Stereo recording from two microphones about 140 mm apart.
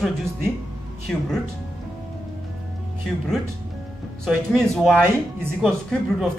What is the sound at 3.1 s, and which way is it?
Speech, 5° left (ahead or behind).